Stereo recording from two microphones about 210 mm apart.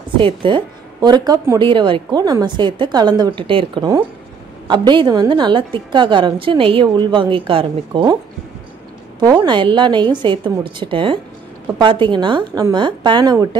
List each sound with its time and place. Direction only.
0.2 s a woman's voice: 25° right (ahead or behind)
9.2 s a woman's voice: 20° right (ahead or behind)